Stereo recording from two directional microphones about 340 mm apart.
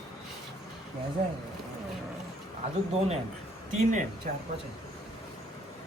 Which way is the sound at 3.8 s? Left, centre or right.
Right.